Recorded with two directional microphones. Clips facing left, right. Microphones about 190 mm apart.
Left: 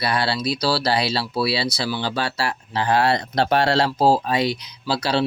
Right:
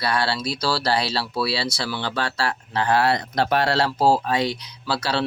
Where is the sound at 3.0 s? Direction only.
25° left (ahead or behind).